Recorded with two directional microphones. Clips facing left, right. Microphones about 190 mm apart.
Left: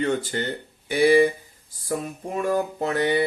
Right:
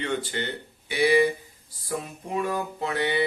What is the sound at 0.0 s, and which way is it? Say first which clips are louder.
Speech: left 4 dB; 45° left (ahead or behind).